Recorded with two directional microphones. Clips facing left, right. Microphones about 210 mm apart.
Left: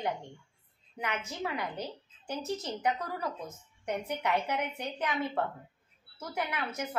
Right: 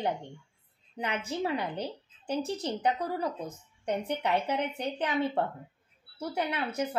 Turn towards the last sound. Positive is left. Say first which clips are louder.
# right 4 dB
turn(degrees=-30)  # may be behind; listen again after turning